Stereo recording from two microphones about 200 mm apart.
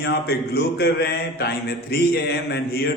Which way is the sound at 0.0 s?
50° left (ahead or behind).